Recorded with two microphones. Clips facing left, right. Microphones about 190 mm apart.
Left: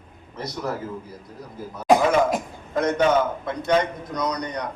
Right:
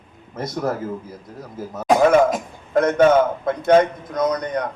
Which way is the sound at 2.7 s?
55° right (ahead or behind).